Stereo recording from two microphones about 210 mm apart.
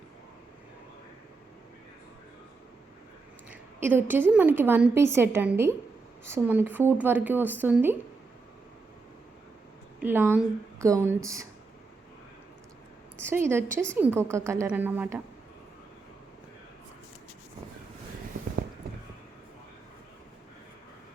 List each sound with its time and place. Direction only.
3.5 s a woman's voice: 10° right (ahead or behind)
10.0 s a woman's voice: 10° right (ahead or behind)
13.2 s a woman's voice: 10° right (ahead or behind)
18.3 s a sound: 35° right (ahead or behind)